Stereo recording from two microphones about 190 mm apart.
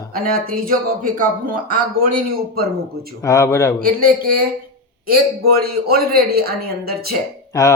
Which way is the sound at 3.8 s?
50° right (ahead or behind).